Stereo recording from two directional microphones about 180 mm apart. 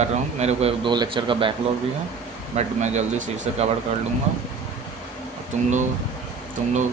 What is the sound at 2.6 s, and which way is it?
Speech, 40° right (ahead or behind).